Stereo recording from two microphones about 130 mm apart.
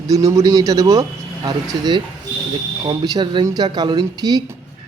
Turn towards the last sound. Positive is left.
turn(degrees=-30)  # may be behind; listen again after turning